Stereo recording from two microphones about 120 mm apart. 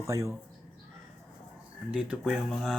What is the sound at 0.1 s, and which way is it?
Speech, 25° right (ahead or behind).